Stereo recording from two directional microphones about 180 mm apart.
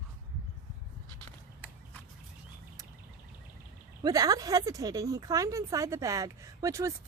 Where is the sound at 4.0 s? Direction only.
20° right (ahead or behind).